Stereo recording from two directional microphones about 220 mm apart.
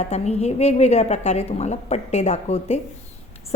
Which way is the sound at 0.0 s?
30° left (ahead or behind).